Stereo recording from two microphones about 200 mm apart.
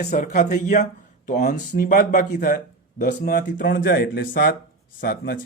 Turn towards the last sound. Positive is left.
turn(degrees=50)  # may be behind; listen again after turning